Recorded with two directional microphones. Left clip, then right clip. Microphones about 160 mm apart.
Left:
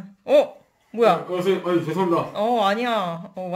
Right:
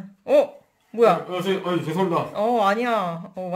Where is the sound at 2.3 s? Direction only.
5° right (ahead or behind).